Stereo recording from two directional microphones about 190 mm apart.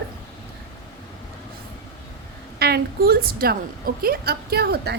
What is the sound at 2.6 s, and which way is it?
A woman's voice, 55° right (ahead or behind).